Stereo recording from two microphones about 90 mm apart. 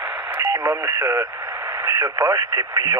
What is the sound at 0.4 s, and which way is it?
Speech, 25° right (ahead or behind).